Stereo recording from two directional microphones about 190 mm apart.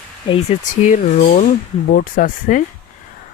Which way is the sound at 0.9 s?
40° left (ahead or behind).